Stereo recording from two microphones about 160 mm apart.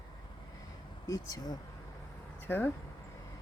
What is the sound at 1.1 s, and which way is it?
Speech, 20° left (ahead or behind).